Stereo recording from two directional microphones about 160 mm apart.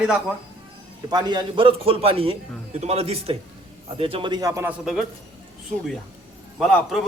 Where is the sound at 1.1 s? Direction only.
25° right (ahead or behind).